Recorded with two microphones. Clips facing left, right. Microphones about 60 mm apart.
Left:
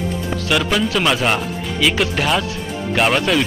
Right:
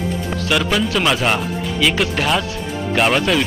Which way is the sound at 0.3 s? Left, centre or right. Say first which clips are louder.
Even; centre.